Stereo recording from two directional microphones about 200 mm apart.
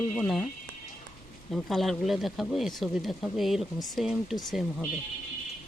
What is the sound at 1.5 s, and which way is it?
Speech, centre (ahead or behind).